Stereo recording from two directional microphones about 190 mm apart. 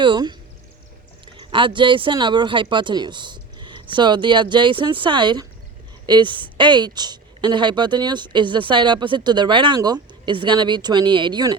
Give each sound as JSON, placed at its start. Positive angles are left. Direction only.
{"t": 0.0, "sound": "a woman's voice", "side_deg": -25}